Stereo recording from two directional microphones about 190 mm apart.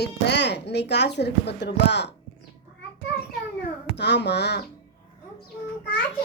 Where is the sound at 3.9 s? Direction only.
65° left (ahead or behind).